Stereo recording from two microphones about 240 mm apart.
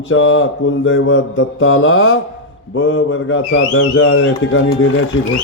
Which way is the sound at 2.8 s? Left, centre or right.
Left.